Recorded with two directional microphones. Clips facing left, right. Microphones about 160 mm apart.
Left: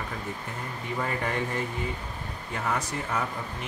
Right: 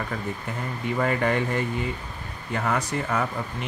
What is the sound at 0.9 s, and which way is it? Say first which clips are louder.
Speech: right 6 dB; 70° right (ahead or behind).